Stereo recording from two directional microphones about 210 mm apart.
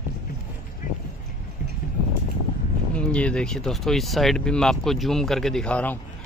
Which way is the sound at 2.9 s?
5° left (ahead or behind).